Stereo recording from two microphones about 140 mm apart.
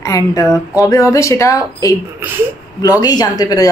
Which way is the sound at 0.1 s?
25° left (ahead or behind).